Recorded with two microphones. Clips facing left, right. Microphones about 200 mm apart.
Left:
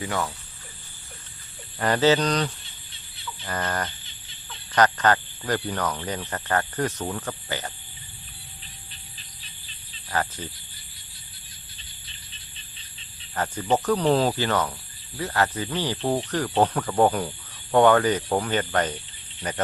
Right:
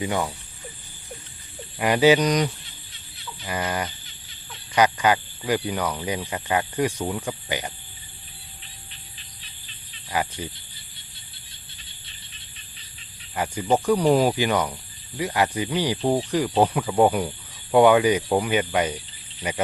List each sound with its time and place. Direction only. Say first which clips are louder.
0.0 s speech: right 3 dB; 15° right (ahead or behind)
1.8 s speech: right 3 dB; 10° right (ahead or behind)
10.1 s speech: right 1 dB; 10° right (ahead or behind)
13.3 s speech: right 2 dB; 10° right (ahead or behind)